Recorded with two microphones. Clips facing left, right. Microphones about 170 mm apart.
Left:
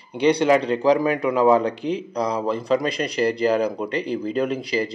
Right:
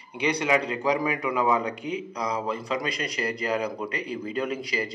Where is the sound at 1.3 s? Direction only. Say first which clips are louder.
Left 8 dB; 30° left (ahead or behind).